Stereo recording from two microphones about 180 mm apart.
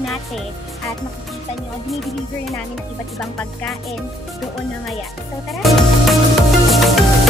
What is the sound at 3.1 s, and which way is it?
Music, 5° left (ahead or behind).